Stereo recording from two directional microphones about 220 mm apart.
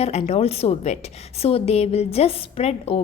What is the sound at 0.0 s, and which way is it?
A woman's voice, 30° left (ahead or behind).